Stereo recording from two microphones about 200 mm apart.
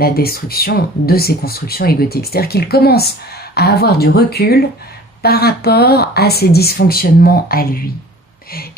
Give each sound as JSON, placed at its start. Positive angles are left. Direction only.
{"t": 0.0, "sound": "speech", "side_deg": 50}